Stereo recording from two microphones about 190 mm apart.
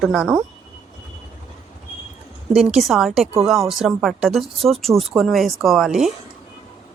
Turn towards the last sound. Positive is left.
turn(degrees=0)  # may be behind; listen again after turning